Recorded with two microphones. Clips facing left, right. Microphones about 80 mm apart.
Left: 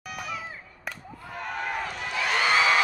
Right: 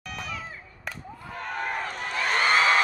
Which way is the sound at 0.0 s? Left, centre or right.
Centre.